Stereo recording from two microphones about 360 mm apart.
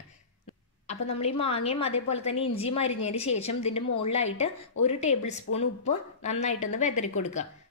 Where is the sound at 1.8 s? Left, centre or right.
Left.